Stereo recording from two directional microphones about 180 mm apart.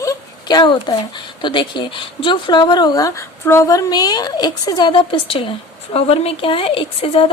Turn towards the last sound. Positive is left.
turn(degrees=30)  # may be behind; listen again after turning